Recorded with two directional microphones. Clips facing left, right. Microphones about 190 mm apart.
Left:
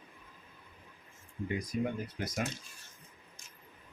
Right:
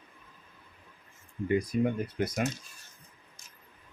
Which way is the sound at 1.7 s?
60° right (ahead or behind).